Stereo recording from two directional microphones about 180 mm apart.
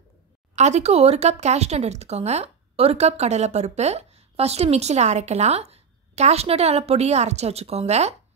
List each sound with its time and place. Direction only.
0.6 s speech: 40° right (ahead or behind)